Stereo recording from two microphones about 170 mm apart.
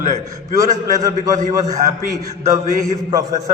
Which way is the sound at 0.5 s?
20° right (ahead or behind).